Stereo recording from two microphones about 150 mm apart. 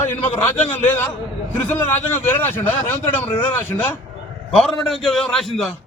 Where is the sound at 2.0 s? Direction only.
15° left (ahead or behind).